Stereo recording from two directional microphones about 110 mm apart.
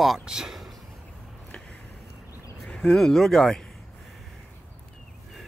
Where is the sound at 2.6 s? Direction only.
5° left (ahead or behind).